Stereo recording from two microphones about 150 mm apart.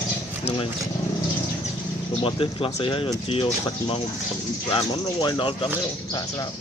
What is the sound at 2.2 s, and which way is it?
Speech, 35° left (ahead or behind).